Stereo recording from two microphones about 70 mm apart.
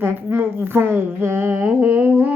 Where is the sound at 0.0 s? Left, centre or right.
Right.